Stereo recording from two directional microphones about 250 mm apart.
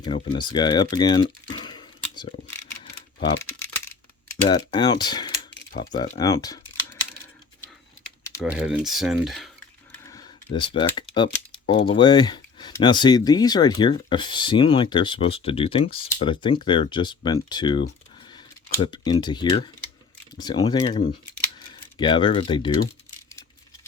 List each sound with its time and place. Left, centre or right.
0.0 s speech: centre
3.6 s coin: centre
5.5 s coin: left
6.1 s speech: centre
8.4 s speech: centre
10.1 s computer keyboard: centre
11.1 s typing: centre
11.9 s speech: centre